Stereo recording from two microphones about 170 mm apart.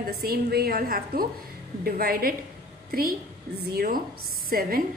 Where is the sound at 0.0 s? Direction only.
65° right (ahead or behind).